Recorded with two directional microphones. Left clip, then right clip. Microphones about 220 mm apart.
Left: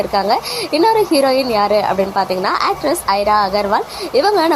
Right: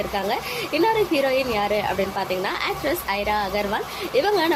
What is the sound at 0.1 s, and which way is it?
A woman's voice, 25° left (ahead or behind).